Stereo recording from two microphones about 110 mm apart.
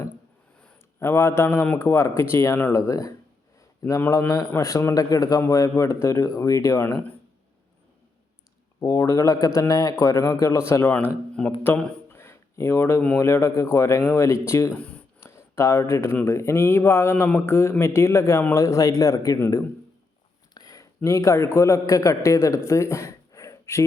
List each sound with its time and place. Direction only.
0.9 s a man's voice: 20° left (ahead or behind)
4.1 s a man's voice: 30° left (ahead or behind)
8.8 s a man's voice: 30° left (ahead or behind)
12.0 s a sound: 20° left (ahead or behind)
13.1 s a man's voice: 25° left (ahead or behind)
14.8 s speech: 10° left (ahead or behind)
15.2 s a sound: 25° left (ahead or behind)
16.2 s a man's voice: 25° left (ahead or behind)
20.5 s a man's voice: 35° left (ahead or behind)